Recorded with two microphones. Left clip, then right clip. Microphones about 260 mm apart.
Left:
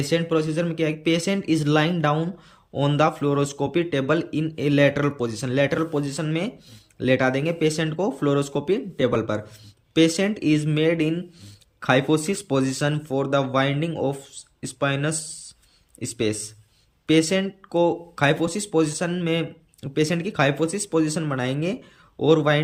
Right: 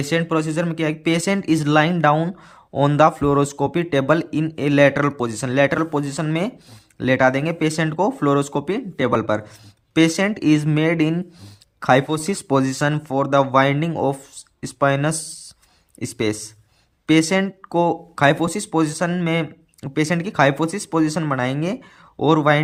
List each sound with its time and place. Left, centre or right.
0.0 s speech: centre